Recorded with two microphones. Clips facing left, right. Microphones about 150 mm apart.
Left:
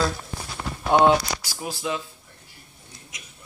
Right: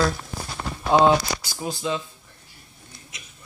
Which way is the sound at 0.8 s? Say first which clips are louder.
Even; 5° left (ahead or behind).